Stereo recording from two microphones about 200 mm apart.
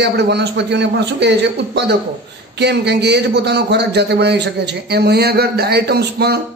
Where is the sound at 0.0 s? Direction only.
55° right (ahead or behind).